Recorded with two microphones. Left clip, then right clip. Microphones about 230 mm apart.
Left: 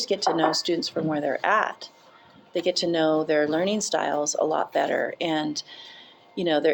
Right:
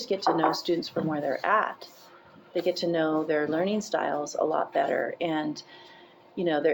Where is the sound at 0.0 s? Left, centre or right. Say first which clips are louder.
Left 2 dB; left.